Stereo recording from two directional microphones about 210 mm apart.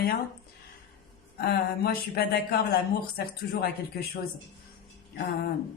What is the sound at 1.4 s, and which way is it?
Speech, 50° left (ahead or behind).